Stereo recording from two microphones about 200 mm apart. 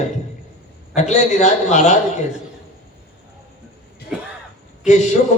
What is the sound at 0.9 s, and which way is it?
A man's voice, 35° left (ahead or behind).